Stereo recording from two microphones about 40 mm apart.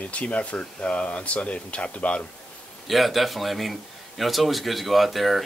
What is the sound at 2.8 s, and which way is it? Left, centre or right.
Speech, centre.